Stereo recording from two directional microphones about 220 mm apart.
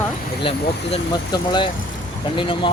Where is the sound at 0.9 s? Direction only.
20° left (ahead or behind).